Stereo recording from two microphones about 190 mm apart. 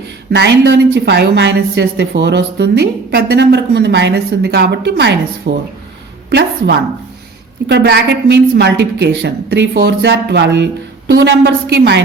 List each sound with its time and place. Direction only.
0.3 s a woman's voice: 60° right (ahead or behind)
7.7 s a woman's voice: 60° right (ahead or behind)